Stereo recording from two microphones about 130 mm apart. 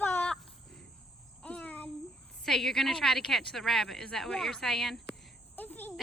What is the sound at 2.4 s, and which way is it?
A woman's voice, 5° left (ahead or behind).